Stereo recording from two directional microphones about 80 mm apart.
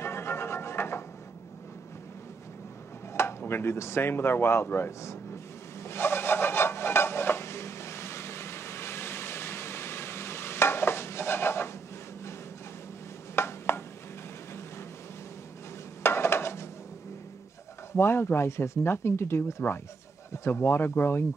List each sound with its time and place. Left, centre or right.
0.0 s music: left
3.1 s speech: left
5.9 s filing: left
13.4 s a sound: left
16.0 s stir: left
17.9 s speech: left